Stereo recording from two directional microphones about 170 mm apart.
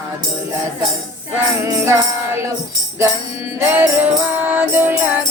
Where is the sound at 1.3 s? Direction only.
15° right (ahead or behind).